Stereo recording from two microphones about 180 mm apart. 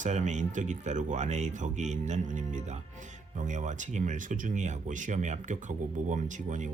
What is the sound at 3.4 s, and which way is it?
Speech, 40° right (ahead or behind).